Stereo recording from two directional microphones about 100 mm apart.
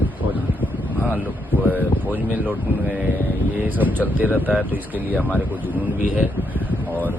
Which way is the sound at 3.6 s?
15° right (ahead or behind).